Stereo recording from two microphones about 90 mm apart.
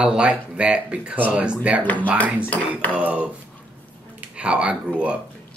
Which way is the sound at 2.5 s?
15° left (ahead or behind).